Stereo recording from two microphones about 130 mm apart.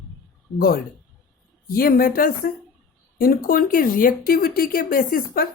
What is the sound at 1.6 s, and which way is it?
Speech, 90° left.